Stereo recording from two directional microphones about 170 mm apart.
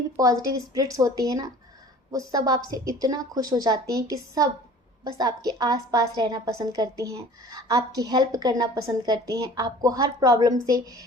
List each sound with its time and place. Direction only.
0.2 s a woman's voice: 20° right (ahead or behind)